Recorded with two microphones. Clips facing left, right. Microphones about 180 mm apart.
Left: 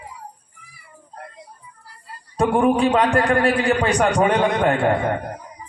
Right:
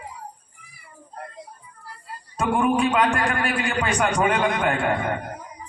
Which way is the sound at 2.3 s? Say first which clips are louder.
Left 4 dB; 35° left (ahead or behind).